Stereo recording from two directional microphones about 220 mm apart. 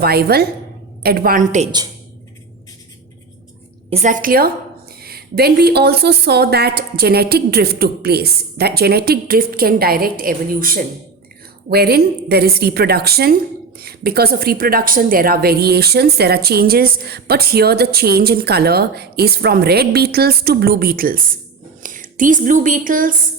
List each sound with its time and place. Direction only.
0.0 s a woman's voice: 45° right (ahead or behind)
3.8 s a woman's voice: 30° right (ahead or behind)